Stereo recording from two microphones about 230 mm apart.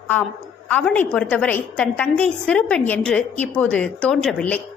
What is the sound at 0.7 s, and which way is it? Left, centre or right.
A woman's voice, centre.